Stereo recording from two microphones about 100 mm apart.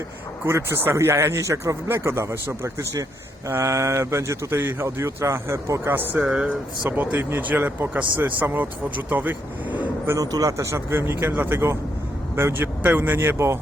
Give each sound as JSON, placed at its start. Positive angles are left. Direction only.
{"t": 0.4, "sound": "speech", "side_deg": -25}
{"t": 6.1, "sound": "speech", "side_deg": -10}
{"t": 10.2, "sound": "speech", "side_deg": -35}